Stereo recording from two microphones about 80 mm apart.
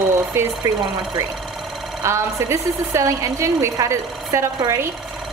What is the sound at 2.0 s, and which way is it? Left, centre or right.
A woman's voice, right.